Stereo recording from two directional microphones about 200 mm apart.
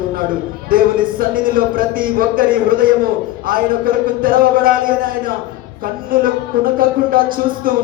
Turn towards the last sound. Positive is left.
turn(degrees=-45)  # may be behind; listen again after turning